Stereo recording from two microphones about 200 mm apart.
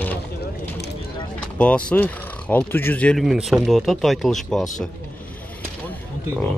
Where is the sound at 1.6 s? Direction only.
5° left (ahead or behind).